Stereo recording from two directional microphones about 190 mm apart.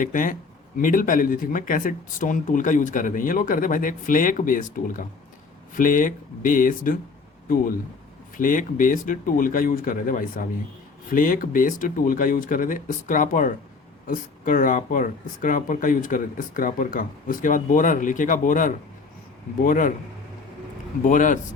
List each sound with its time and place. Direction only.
0.0 s speech: 45° left (ahead or behind)
21.0 s speech: 45° left (ahead or behind)